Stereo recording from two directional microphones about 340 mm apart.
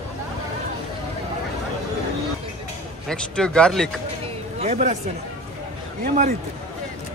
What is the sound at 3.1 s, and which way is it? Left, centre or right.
Speech, centre.